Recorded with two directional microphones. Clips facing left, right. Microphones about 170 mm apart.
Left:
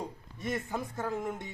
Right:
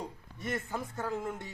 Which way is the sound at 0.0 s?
10° left (ahead or behind).